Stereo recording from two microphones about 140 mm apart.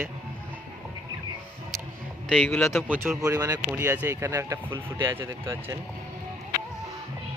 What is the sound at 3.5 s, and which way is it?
Speech, 15° right (ahead or behind).